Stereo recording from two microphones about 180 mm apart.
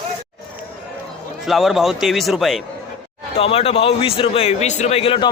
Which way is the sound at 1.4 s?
Centre (ahead or behind).